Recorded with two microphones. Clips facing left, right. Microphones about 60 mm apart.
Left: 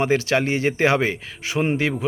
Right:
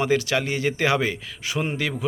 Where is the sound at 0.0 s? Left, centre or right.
Left.